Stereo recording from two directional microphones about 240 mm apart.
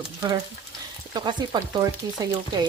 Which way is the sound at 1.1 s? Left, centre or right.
Centre.